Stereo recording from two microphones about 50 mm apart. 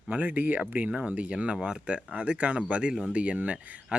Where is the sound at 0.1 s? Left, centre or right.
Right.